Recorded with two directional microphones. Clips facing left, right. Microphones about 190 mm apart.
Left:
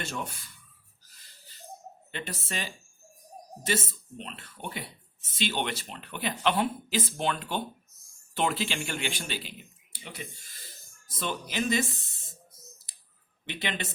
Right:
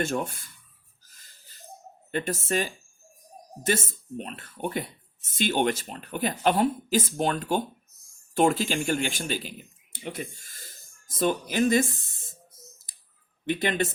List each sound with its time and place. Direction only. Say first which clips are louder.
0.0 s speech: right 8 dB; 50° right (ahead or behind)
1.1 s a sound: left 1 dB; 45° right (ahead or behind)
2.1 s a man's voice: right 10 dB; 45° right (ahead or behind)
13.4 s speech: right 9 dB; 45° right (ahead or behind)